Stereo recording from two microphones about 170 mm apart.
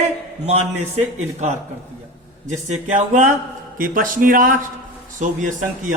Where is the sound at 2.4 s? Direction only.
45° right (ahead or behind).